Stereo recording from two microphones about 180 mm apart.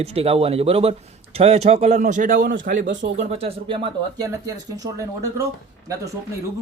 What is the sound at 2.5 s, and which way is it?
Speech, 80° right.